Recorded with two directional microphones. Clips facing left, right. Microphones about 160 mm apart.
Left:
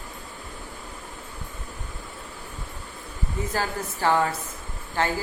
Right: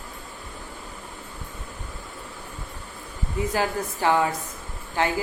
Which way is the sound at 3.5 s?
15° right (ahead or behind).